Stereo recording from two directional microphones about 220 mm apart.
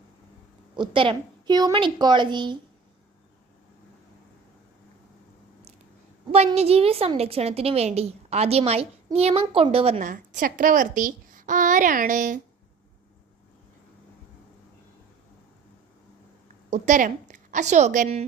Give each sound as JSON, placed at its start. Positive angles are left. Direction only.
{"t": 0.8, "sound": "a woman's voice", "side_deg": -20}
{"t": 6.3, "sound": "a woman's voice", "side_deg": -30}
{"t": 16.6, "sound": "a woman's voice", "side_deg": -35}